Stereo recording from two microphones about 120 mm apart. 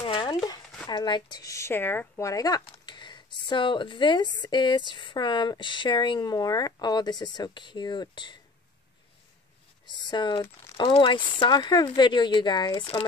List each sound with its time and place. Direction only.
0.0 s a sound: 45° left (ahead or behind)
0.8 s speech: 40° left (ahead or behind)
9.8 s speech: 40° left (ahead or behind)